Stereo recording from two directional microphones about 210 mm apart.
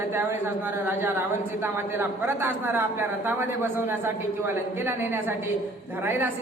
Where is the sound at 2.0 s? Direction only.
10° right (ahead or behind).